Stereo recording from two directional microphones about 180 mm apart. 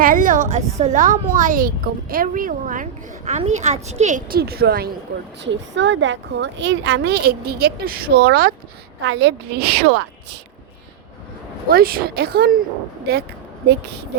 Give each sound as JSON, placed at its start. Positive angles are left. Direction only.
{"t": 0.0, "sound": "a woman's voice", "side_deg": -50}
{"t": 4.4, "sound": "speech", "side_deg": -60}
{"t": 5.4, "sound": "speech", "side_deg": -85}
{"t": 9.0, "sound": "a woman's voice", "side_deg": -80}
{"t": 11.7, "sound": "speech", "side_deg": -55}